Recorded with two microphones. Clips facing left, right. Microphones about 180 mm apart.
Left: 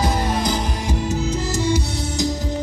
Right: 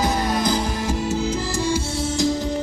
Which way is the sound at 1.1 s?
20° left (ahead or behind).